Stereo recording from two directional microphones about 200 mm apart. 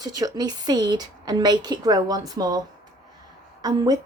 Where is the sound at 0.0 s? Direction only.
20° right (ahead or behind).